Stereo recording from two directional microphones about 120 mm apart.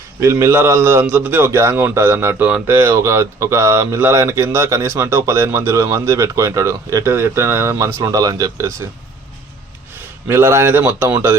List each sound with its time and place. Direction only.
0.2 s a man's voice: 20° right (ahead or behind)
10.2 s a man's voice: 20° right (ahead or behind)